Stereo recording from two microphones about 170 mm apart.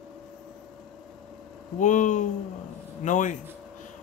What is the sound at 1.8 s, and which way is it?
Speech, 45° left (ahead or behind).